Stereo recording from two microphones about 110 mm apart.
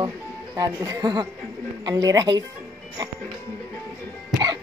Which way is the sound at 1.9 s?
30° right (ahead or behind).